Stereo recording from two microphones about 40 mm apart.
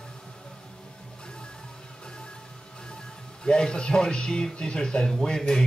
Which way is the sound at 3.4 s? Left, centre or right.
Left.